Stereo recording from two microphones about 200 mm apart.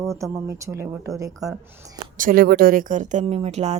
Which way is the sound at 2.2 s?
45° right (ahead or behind).